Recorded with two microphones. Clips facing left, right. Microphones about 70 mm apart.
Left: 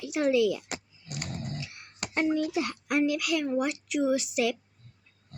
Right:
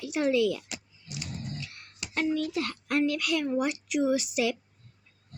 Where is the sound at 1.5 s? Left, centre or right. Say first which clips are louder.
Left 1 dB; centre.